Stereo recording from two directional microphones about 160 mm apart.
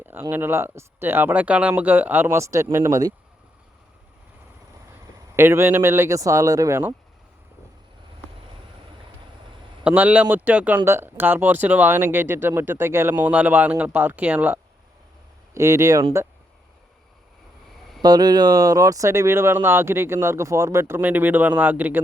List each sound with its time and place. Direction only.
0.0 s speech: 15° right (ahead or behind)
5.4 s speech: 15° right (ahead or behind)
9.8 s speech: 10° right (ahead or behind)
18.0 s speech: 25° right (ahead or behind)